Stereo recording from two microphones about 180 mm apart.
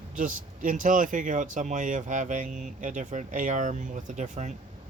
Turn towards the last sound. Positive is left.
turn(degrees=-40)  # may be behind; listen again after turning